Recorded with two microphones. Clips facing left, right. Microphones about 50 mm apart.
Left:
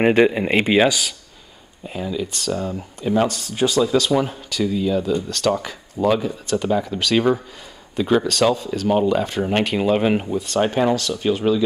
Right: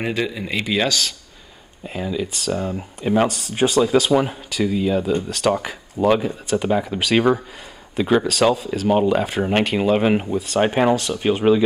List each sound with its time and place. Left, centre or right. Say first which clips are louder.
0.0 s speech: left 8 dB; left
0.7 s speech: left 2 dB; centre
1.9 s speech: right 1 dB; centre
10.6 s speech: right 2 dB; right